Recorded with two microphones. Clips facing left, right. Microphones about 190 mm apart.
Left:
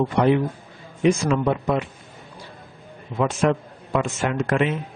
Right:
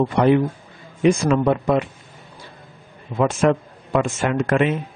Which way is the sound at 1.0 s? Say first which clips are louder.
Right 3 dB; 55° right (ahead or behind).